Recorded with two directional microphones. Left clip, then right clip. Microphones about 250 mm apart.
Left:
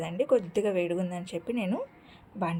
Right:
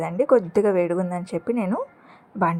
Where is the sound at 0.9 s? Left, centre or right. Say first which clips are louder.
Right 7 dB; centre.